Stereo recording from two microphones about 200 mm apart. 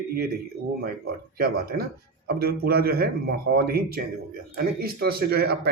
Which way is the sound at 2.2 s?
50° right (ahead or behind).